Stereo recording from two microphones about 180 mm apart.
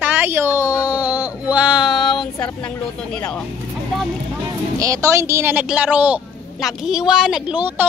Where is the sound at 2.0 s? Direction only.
25° left (ahead or behind).